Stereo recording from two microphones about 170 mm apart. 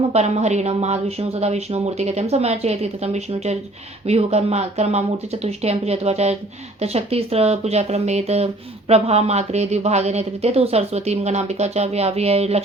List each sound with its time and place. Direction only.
0.1 s speech: 40° right (ahead or behind)